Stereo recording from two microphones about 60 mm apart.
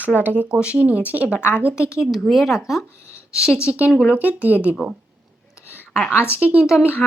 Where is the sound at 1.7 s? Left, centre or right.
Left.